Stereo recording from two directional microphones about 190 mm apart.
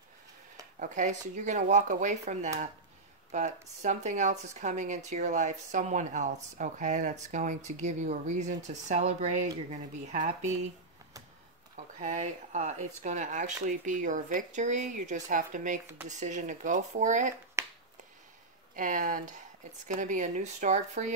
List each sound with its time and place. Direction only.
0.7 s speech: 40° right (ahead or behind)
11.7 s speech: 40° right (ahead or behind)
17.6 s finger snapping: 15° right (ahead or behind)
18.8 s speech: 45° right (ahead or behind)